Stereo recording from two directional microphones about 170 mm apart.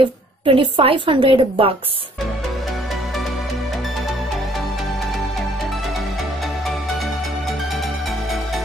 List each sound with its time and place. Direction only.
0.5 s a woman's voice: 30° right (ahead or behind)